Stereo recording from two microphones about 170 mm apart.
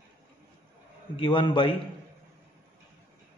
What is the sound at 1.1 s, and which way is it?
Speech, 30° left (ahead or behind).